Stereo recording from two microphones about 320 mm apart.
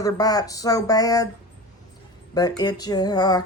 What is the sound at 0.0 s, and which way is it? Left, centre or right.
Speech, centre.